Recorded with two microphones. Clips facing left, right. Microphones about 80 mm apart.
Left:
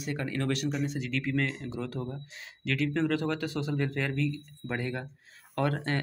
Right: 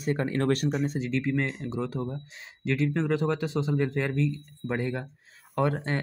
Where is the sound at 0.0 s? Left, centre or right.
Right.